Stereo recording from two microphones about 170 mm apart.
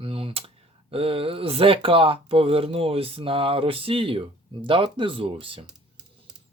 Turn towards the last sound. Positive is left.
turn(degrees=-30)  # may be behind; listen again after turning